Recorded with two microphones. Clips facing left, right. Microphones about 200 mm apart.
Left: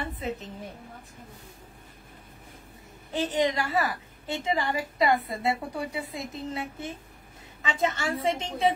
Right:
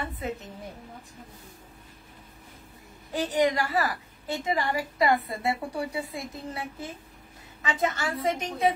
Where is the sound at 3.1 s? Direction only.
25° left (ahead or behind).